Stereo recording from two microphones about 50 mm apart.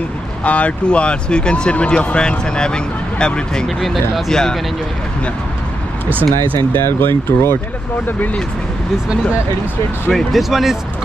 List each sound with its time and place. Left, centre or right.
0.4 s speech: left
6.7 s speech: left
10.1 s speech: centre